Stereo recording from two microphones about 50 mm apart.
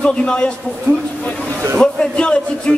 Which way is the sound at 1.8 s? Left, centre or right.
Centre.